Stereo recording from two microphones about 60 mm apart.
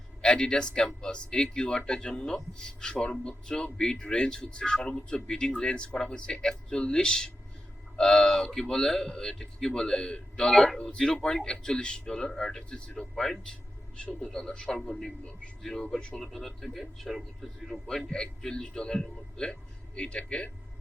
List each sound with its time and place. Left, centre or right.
0.2 s a man's voice: centre